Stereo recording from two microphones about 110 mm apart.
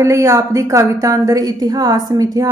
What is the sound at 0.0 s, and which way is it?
A woman's voice, 25° right (ahead or behind).